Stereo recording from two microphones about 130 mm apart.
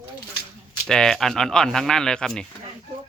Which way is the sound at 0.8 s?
5° left (ahead or behind).